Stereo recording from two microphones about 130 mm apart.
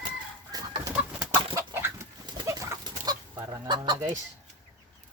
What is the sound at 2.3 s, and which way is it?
Livestock, 25° right (ahead or behind).